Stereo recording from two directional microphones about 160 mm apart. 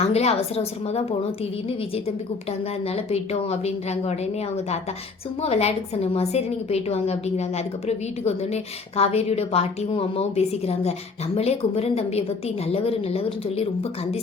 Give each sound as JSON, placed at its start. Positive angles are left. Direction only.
{"t": 0.0, "sound": "a woman's voice", "side_deg": 40}
{"t": 2.8, "sound": "a woman's voice", "side_deg": 40}